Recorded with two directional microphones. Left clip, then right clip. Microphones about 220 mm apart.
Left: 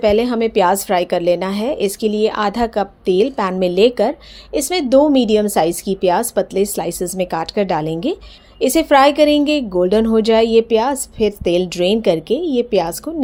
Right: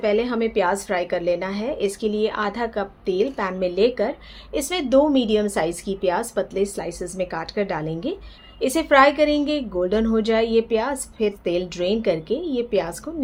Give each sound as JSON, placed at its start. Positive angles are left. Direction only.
{"t": 0.0, "sound": "speech", "side_deg": 35}